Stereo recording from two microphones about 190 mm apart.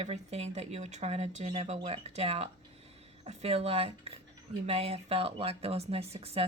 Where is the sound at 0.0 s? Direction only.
35° right (ahead or behind).